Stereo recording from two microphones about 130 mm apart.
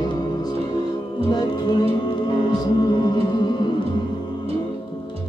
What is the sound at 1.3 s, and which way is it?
Music, 35° left (ahead or behind).